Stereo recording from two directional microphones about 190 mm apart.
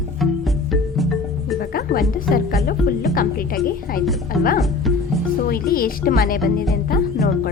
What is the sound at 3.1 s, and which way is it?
Speech, 50° left (ahead or behind).